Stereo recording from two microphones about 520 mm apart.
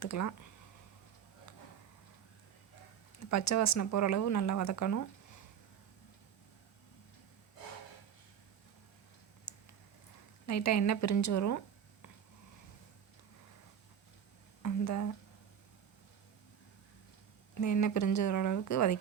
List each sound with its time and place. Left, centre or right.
0.0 s speech: left
3.2 s speech: left
9.5 s a sound: left
10.4 s speech: left
14.6 s speech: left
17.6 s speech: left